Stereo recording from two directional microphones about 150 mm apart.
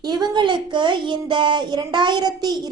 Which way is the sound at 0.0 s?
30° right (ahead or behind).